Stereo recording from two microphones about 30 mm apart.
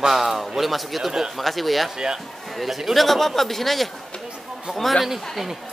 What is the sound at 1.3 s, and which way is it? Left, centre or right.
Speech, centre.